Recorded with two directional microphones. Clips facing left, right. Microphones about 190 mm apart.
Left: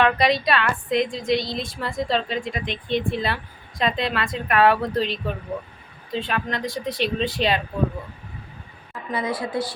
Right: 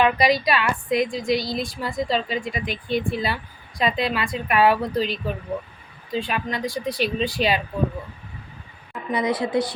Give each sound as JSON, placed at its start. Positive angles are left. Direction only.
{"t": 0.0, "sound": "speech", "side_deg": -5}
{"t": 8.9, "sound": "speech", "side_deg": -20}